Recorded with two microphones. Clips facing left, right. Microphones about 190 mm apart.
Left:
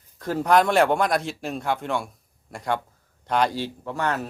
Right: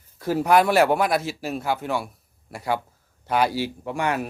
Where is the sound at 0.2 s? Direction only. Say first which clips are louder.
Right 1 dB; 5° right (ahead or behind).